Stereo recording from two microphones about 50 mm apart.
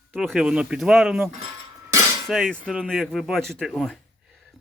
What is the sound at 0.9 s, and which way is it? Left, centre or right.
Speech, centre.